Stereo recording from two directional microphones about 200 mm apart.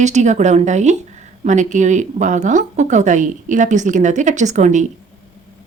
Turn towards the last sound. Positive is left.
turn(degrees=-35)  # may be behind; listen again after turning